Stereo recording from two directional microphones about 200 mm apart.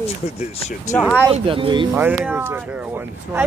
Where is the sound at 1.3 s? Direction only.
25° right (ahead or behind).